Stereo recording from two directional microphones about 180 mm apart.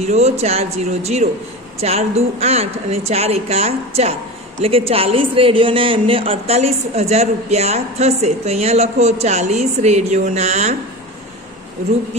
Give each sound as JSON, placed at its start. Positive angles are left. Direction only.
{"t": 0.0, "sound": "a man's voice", "side_deg": -35}